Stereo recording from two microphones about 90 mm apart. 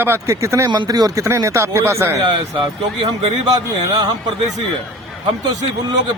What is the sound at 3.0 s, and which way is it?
A man's voice, 55° right (ahead or behind).